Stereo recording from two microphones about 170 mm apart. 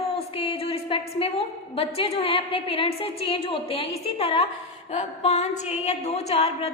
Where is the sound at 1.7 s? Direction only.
35° left (ahead or behind).